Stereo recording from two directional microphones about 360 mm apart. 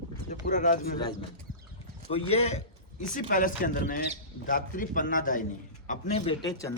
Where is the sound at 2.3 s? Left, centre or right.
Centre.